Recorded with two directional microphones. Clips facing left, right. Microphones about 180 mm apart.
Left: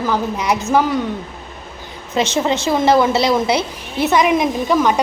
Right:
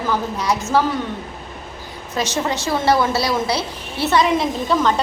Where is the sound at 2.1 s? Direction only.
25° left (ahead or behind).